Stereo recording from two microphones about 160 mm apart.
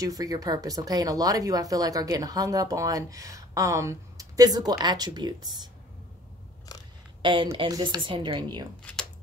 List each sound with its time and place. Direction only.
0.0 s speech: 20° right (ahead or behind)
7.2 s speech: 30° right (ahead or behind)
8.9 s speech: 10° left (ahead or behind)